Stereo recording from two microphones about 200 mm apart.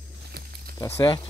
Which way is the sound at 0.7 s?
20° left (ahead or behind).